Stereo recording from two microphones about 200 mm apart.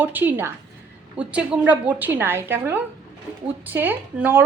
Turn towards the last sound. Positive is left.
turn(degrees=-5)  # may be behind; listen again after turning